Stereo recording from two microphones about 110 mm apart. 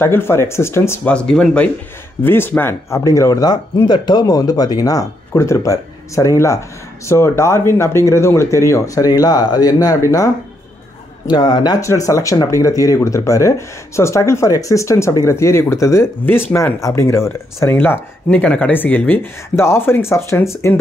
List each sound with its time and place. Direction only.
0.0 s speech: 20° left (ahead or behind)
1.0 s speech: 10° left (ahead or behind)
2.2 s speech: 20° left (ahead or behind)